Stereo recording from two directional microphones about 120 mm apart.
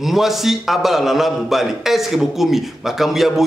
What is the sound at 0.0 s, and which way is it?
A man's voice, centre (ahead or behind).